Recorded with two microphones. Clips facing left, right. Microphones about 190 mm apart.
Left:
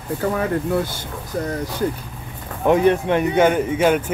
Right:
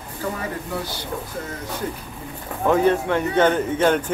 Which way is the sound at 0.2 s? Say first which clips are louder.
Left 6 dB; 60° left (ahead or behind).